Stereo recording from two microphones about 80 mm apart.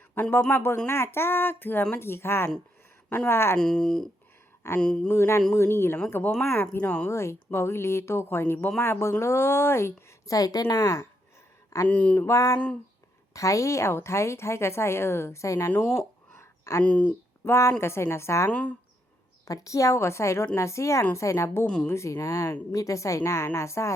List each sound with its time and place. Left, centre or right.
0.1 s a woman's voice: left
3.6 s speech: centre
5.0 s a woman's voice: left
6.7 s speech: centre
7.1 s a woman's voice: left
10.3 s speech: left
11.9 s speech: centre
12.2 s a woman's voice: left
16.4 s a sound: left
16.8 s speech: centre
17.4 s a woman's voice: left
18.5 s speech: centre
19.5 s a woman's voice: left